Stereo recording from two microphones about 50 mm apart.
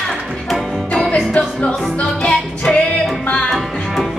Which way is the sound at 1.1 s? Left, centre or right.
Left.